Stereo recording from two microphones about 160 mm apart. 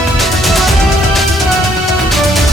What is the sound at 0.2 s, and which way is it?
Music, centre (ahead or behind).